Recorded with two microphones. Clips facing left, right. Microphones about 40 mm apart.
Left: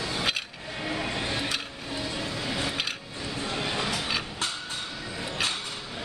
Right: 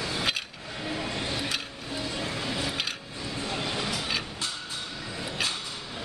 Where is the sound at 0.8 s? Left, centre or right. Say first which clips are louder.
Left 2 dB; left.